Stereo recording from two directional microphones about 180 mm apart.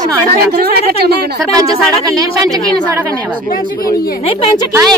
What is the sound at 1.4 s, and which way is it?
Speech, 20° right (ahead or behind).